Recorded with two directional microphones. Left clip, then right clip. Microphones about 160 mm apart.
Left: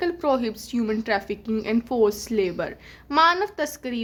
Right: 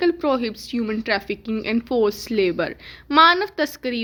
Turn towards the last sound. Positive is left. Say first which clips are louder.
# right 4 dB
turn(degrees=-20)  # may be behind; listen again after turning